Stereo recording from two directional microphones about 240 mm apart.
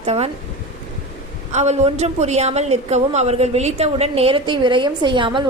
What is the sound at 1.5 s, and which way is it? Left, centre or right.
A woman's voice, right.